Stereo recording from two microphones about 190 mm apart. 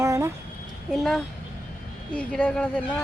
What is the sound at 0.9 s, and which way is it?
Speech, centre (ahead or behind).